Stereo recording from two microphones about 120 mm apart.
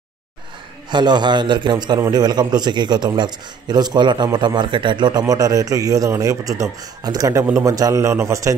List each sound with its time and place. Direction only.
0.8 s a man's voice: 40° right (ahead or behind)